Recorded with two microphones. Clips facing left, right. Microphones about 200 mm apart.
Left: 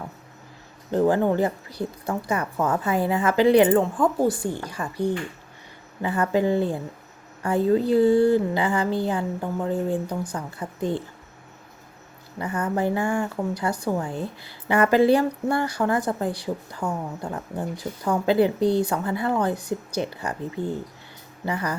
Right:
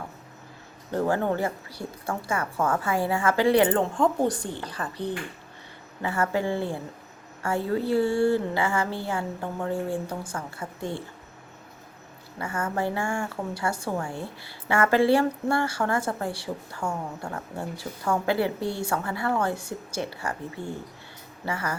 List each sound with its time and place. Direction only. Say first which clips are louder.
0.9 s a woman's voice: left 5 dB; 20° left (ahead or behind)
3.8 s a woman's voice: left 2 dB; 5° left (ahead or behind)
12.4 s a woman's voice: left 4 dB; 20° left (ahead or behind)
21.4 s a woman's voice: left 3 dB; 20° left (ahead or behind)